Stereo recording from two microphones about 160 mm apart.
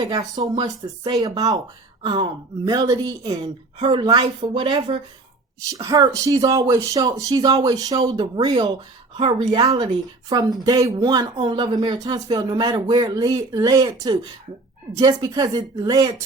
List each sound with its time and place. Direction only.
0.0 s a woman's voice: 25° right (ahead or behind)